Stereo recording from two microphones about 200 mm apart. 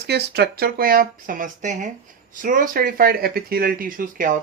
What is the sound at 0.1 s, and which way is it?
Speech, 55° right (ahead or behind).